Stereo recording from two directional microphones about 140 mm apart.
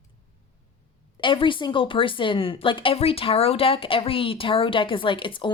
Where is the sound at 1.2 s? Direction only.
35° left (ahead or behind).